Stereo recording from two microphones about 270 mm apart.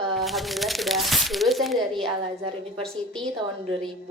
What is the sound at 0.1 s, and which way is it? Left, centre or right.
Speech, centre.